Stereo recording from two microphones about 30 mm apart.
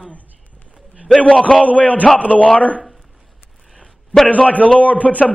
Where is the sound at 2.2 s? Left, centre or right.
Left.